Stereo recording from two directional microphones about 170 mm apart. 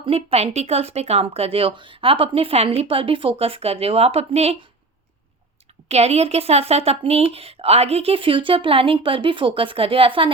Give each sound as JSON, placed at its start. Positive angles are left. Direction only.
{"t": 0.0, "sound": "speech", "side_deg": -35}
{"t": 5.9, "sound": "speech", "side_deg": -40}